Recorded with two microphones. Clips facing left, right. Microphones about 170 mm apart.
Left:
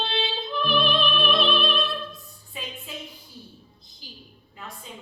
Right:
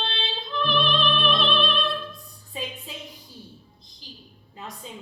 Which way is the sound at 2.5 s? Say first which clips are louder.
Right 4 dB; 35° right (ahead or behind).